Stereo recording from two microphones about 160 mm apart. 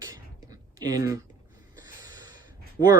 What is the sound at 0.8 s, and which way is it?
Speech, 25° right (ahead or behind).